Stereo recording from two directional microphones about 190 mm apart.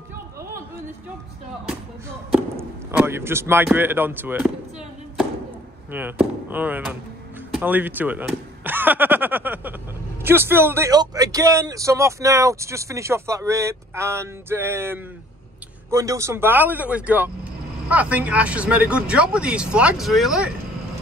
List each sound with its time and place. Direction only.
1.7 s a man's voice: 10° right (ahead or behind)
5.9 s a man's voice: 10° right (ahead or behind)